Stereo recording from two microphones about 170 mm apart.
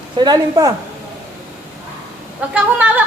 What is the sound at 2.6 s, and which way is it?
Speech, 10° right (ahead or behind).